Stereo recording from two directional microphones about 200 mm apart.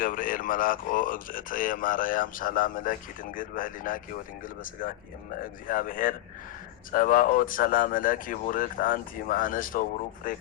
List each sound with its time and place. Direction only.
0.0 s speech: 45° left (ahead or behind)